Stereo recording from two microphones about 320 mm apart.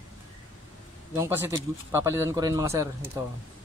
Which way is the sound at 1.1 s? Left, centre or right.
Centre.